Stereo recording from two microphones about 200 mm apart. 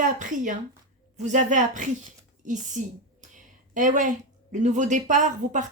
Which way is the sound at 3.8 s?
40° right (ahead or behind).